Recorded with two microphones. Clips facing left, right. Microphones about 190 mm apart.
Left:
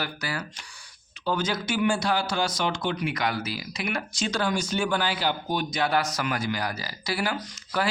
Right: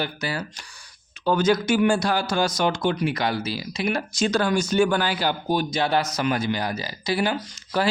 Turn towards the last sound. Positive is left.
turn(degrees=-25)  # may be behind; listen again after turning